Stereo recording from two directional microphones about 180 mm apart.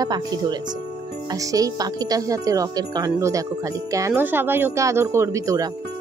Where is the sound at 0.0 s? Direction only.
20° right (ahead or behind).